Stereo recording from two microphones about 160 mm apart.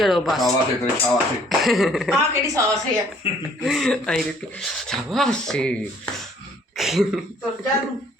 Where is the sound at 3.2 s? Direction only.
35° left (ahead or behind).